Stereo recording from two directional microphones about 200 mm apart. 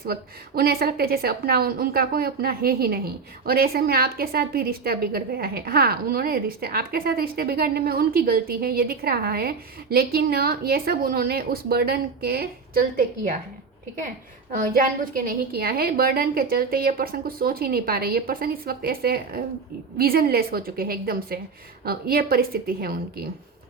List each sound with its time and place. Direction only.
0.0 s a woman's voice: 50° right (ahead or behind)
14.5 s a woman's voice: 45° right (ahead or behind)